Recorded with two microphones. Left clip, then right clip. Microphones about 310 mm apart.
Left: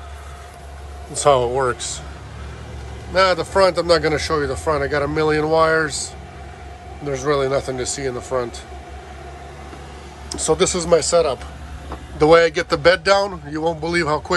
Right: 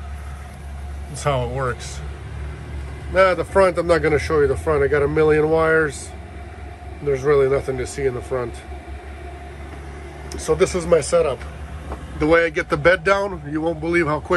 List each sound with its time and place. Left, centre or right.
1.1 s speech: centre
3.2 s speech: centre
7.1 s speech: centre
10.3 s speech: centre